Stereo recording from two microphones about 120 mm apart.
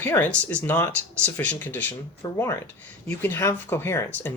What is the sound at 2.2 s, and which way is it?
Speech, 30° left (ahead or behind).